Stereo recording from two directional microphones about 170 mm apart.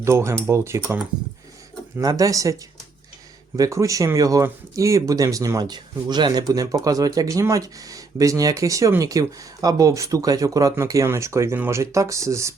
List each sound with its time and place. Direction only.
0.0 s speech: 15° right (ahead or behind)
2.0 s speech: 20° right (ahead or behind)
3.6 s speech: 20° right (ahead or behind)